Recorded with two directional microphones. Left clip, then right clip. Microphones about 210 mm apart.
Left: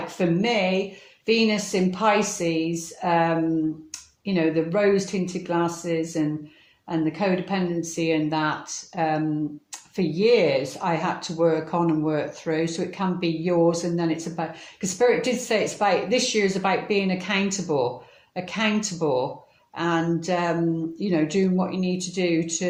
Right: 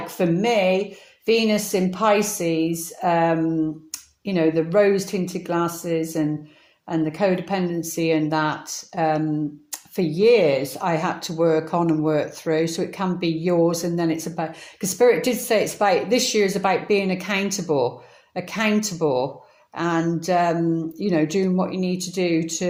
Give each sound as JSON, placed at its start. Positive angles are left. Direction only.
{"t": 0.2, "sound": "speech", "side_deg": -40}